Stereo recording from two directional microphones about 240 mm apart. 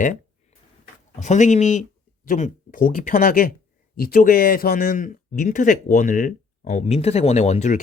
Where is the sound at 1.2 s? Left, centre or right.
Left.